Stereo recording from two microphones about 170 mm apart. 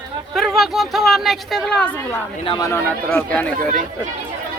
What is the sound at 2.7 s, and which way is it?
Speech, 10° left (ahead or behind).